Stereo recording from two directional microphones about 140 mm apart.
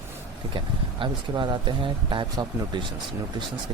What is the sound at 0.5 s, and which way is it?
Speech, 35° right (ahead or behind).